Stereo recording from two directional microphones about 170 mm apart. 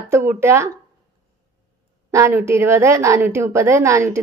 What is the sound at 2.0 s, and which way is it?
A woman's voice, 15° right (ahead or behind).